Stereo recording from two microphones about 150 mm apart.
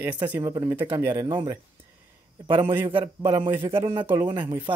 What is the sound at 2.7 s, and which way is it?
Speech, 15° right (ahead or behind).